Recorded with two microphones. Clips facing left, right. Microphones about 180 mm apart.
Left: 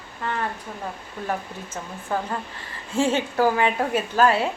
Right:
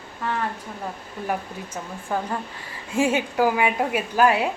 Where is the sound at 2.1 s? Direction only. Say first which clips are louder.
Even; 15° right (ahead or behind).